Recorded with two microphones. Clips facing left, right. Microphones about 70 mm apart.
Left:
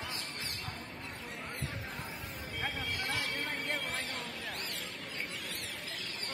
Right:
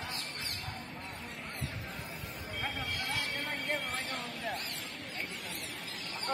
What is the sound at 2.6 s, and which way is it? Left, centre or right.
Vehicle, centre.